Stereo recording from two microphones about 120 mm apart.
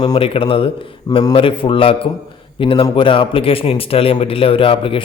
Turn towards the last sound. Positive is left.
turn(degrees=50)  # may be behind; listen again after turning